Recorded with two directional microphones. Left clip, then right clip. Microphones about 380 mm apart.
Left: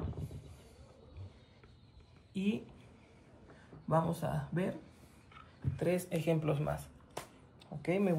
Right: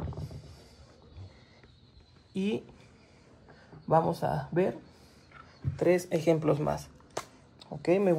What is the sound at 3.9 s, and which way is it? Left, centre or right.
Speech, centre.